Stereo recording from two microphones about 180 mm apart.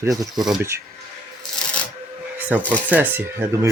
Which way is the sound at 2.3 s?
10° right (ahead or behind).